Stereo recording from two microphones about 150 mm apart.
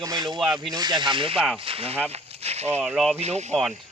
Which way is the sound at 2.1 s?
45° right (ahead or behind).